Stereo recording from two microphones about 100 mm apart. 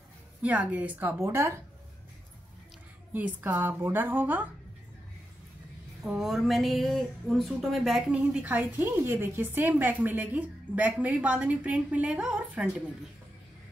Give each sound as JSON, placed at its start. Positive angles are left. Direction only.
{"t": 0.4, "sound": "a woman's voice", "side_deg": -15}
{"t": 3.1, "sound": "a woman's voice", "side_deg": -15}
{"t": 6.0, "sound": "speech", "side_deg": -5}
{"t": 8.2, "sound": "a woman's voice", "side_deg": -15}